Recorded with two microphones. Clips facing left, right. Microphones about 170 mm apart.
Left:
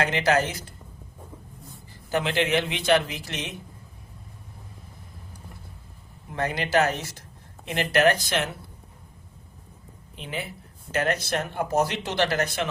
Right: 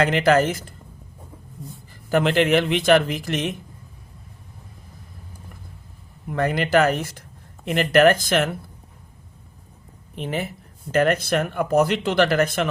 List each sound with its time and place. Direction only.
0.2 s speech: 50° right (ahead or behind)
2.0 s speech: 50° right (ahead or behind)
6.2 s speech: 55° right (ahead or behind)
10.2 s speech: 45° right (ahead or behind)
11.0 s speech: 55° right (ahead or behind)